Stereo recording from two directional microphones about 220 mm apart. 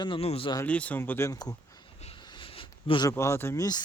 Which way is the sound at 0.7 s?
5° left (ahead or behind).